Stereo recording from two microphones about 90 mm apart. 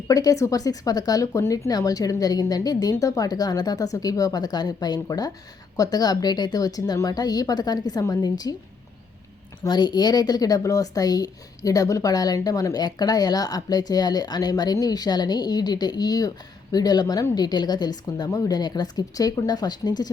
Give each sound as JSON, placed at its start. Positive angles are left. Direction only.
{"t": 0.1, "sound": "speech", "side_deg": 45}
{"t": 9.6, "sound": "speech", "side_deg": 55}